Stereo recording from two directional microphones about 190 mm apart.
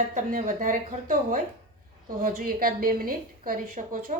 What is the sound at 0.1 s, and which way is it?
A woman's voice, 45° right (ahead or behind).